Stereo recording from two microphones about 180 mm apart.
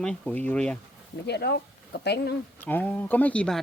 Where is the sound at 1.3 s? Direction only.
65° left (ahead or behind).